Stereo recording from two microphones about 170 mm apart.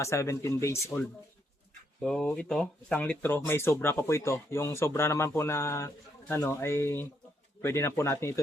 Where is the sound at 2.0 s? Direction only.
5° left (ahead or behind).